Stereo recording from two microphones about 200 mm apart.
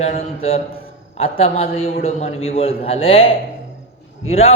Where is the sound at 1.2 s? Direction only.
30° left (ahead or behind).